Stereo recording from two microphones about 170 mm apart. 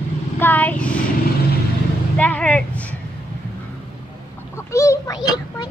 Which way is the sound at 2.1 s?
10° left (ahead or behind).